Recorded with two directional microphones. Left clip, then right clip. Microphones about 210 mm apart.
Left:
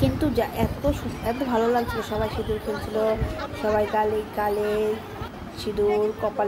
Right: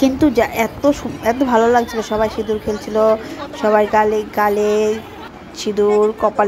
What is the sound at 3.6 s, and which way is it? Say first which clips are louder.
Speech: right 9 dB; 35° right (ahead or behind).